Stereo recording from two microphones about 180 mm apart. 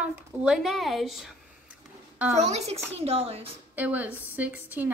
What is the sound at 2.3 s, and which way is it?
A child's voice, 40° right (ahead or behind).